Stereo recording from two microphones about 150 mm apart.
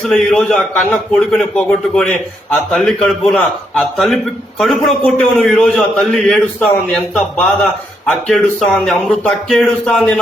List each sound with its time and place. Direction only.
0.1 s a man's voice: 5° left (ahead or behind)
0.9 s speech: 15° left (ahead or behind)
1.4 s a man's voice: centre (ahead or behind)